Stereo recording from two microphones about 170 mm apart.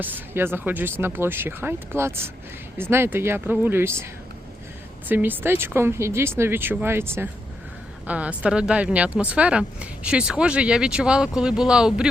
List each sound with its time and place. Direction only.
0.0 s speech: 10° right (ahead or behind)
5.0 s speech: 10° right (ahead or behind)